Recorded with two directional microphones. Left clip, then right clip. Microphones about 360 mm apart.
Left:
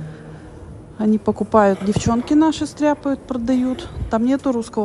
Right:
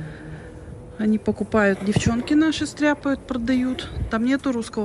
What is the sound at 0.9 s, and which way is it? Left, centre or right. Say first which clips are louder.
A woman's voice: left 4 dB; centre.